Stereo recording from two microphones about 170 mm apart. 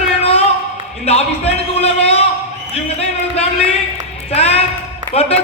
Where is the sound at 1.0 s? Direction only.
35° left (ahead or behind).